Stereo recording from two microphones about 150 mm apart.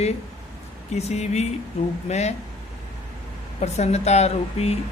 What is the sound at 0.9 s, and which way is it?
Speech, 45° left (ahead or behind).